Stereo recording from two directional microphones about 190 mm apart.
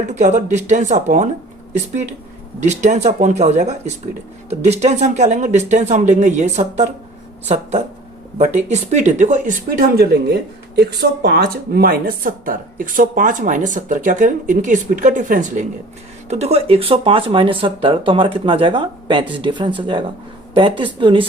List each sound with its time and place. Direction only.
0.1 s speech: 40° right (ahead or behind)
2.6 s speech: 40° right (ahead or behind)